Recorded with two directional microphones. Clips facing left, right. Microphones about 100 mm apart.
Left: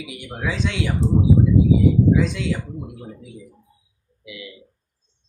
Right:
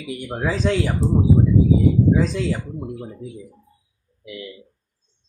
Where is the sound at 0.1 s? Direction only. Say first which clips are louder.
Right 5 dB; 40° right (ahead or behind).